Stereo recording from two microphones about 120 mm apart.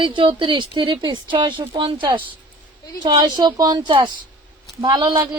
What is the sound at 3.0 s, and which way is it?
Speech, 35° right (ahead or behind).